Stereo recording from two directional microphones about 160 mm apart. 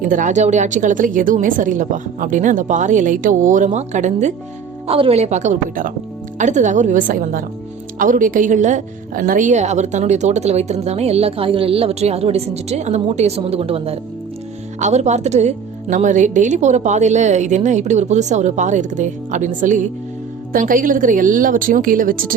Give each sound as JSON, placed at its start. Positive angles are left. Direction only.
{"t": 0.1, "sound": "speech", "side_deg": -55}
{"t": 4.9, "sound": "a woman's voice", "side_deg": -35}